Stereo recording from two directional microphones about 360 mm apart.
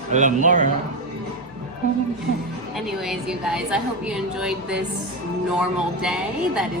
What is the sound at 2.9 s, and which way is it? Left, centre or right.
A woman's voice, centre.